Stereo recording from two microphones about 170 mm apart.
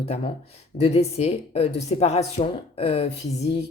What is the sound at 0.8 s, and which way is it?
Speech, 40° left (ahead or behind).